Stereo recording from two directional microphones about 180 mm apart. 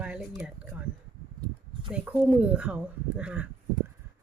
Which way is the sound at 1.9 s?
5° right (ahead or behind).